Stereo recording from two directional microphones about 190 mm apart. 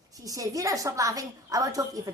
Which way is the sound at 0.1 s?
20° right (ahead or behind).